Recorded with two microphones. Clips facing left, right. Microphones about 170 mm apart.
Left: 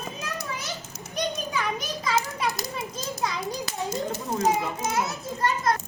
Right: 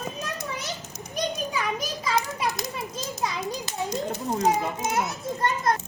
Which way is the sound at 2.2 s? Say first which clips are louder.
Right 1 dB; 20° right (ahead or behind).